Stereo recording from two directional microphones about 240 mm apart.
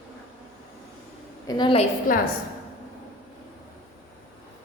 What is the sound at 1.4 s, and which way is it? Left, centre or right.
Speech, centre.